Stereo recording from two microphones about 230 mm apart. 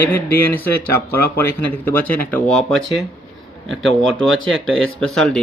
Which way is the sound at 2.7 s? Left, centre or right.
Right.